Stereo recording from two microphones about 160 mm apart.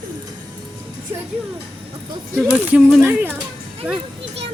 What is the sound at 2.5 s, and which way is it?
Speech, 10° right (ahead or behind).